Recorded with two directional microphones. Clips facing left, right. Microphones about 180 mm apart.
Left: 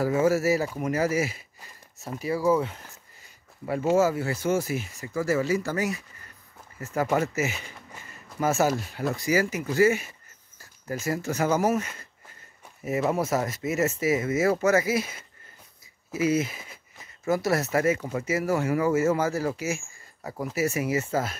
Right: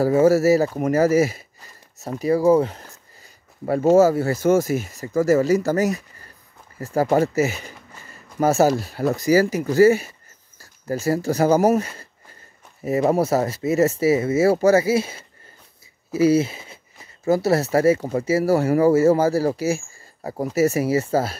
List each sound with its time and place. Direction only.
0.0 s speech: 35° right (ahead or behind)